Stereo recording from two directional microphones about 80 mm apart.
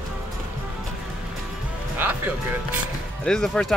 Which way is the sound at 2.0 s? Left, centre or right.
Right.